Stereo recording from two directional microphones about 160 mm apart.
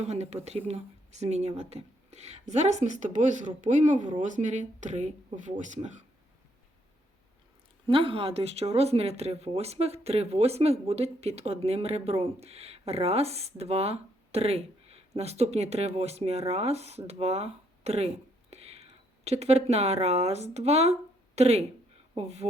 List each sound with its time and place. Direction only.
0.0 s a woman's voice: 45° right (ahead or behind)
7.9 s speech: 35° right (ahead or behind)